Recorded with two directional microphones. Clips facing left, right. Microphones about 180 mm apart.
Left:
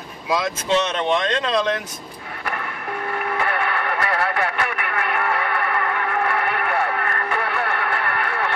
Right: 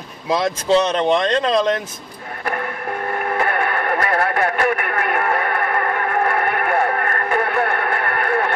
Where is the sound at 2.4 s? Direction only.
40° right (ahead or behind).